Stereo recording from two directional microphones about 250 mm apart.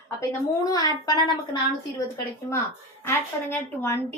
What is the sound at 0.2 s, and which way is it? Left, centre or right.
A woman's voice, centre.